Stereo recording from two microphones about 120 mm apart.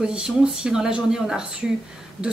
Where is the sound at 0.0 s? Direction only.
10° right (ahead or behind).